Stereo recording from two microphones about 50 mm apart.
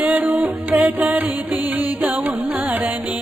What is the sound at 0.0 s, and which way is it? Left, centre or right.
Music, right.